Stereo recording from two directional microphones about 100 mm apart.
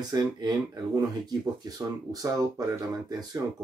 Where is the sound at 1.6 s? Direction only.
35° right (ahead or behind).